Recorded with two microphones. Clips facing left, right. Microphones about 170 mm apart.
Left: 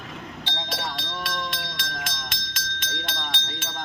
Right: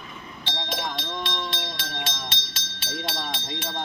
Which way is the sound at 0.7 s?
20° right (ahead or behind).